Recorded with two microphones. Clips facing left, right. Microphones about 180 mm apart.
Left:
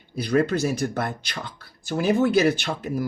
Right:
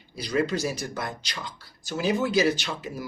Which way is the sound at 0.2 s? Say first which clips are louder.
Left 4 dB; 55° left (ahead or behind).